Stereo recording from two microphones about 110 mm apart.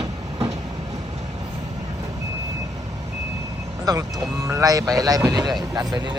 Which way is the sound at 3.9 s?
35° right (ahead or behind).